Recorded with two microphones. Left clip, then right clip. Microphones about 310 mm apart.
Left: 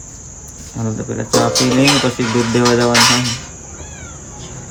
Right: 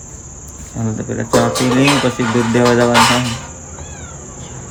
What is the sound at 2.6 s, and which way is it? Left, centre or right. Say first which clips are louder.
Cricket: right 2 dB; centre.